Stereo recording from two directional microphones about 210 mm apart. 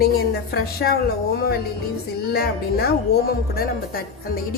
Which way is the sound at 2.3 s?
50° left (ahead or behind).